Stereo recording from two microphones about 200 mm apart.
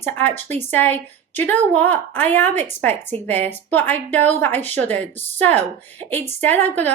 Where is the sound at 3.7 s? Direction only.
10° left (ahead or behind).